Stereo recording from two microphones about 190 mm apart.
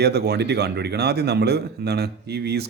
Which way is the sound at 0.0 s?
60° right (ahead or behind).